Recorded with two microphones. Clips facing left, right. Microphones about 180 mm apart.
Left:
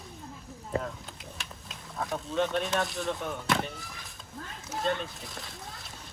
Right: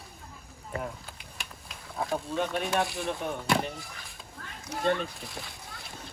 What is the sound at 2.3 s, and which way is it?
Speech, 10° right (ahead or behind).